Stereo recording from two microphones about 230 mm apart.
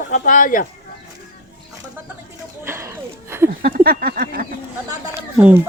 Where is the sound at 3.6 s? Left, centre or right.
Right.